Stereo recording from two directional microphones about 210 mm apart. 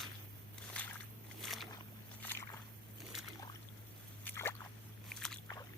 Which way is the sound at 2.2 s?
10° left (ahead or behind).